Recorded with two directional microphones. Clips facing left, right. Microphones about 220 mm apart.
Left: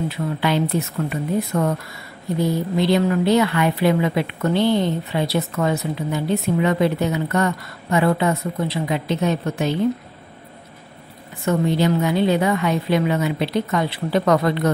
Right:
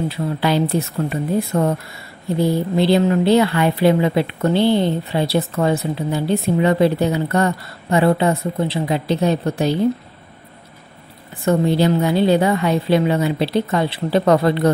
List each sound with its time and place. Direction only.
0.1 s speech: 35° right (ahead or behind)
11.4 s speech: 35° right (ahead or behind)